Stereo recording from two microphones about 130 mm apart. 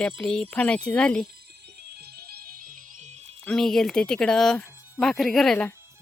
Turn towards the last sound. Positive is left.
turn(degrees=5)  # may be behind; listen again after turning